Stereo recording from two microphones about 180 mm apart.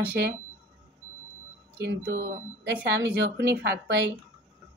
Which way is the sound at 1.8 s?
70° right (ahead or behind).